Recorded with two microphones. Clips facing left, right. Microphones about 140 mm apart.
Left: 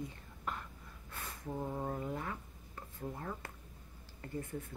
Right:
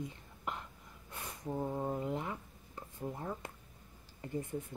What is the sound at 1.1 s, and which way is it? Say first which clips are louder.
Speech: right 3 dB; 15° right (ahead or behind).